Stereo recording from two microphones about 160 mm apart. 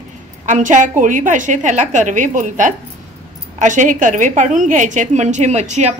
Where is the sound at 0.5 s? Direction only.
50° right (ahead or behind).